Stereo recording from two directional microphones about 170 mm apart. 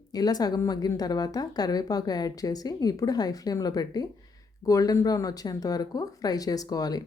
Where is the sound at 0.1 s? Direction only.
25° left (ahead or behind).